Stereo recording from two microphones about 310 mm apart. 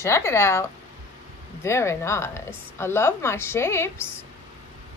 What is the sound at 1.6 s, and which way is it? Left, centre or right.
A woman's voice, centre.